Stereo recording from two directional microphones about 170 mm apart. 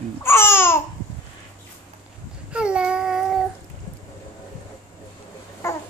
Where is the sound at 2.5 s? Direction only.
5° right (ahead or behind).